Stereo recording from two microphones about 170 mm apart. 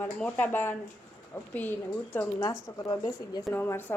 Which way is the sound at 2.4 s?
25° left (ahead or behind).